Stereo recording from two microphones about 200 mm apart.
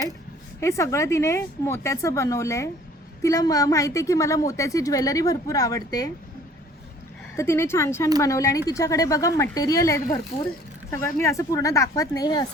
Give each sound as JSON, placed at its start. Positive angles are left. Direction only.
{"t": 0.6, "sound": "a woman's voice", "side_deg": 15}
{"t": 7.3, "sound": "a woman's voice", "side_deg": 15}